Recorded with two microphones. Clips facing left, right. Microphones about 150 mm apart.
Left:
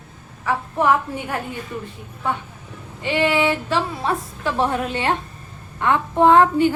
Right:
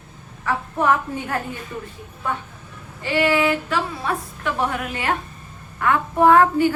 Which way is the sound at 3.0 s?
20° left (ahead or behind).